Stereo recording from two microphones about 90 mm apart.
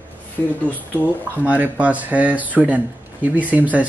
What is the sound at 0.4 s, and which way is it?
Speech, 15° left (ahead or behind).